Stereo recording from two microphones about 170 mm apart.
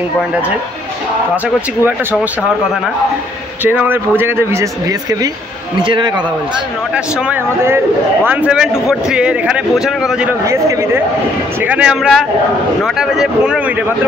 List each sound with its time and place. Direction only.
3.6 s a man's voice: 10° right (ahead or behind)
5.8 s speech: 30° right (ahead or behind)
7.2 s a man's voice: 15° right (ahead or behind)
10.4 s a man's voice: 15° right (ahead or behind)